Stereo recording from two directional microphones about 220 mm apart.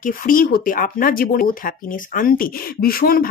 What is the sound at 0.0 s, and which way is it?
Speech, 40° left (ahead or behind).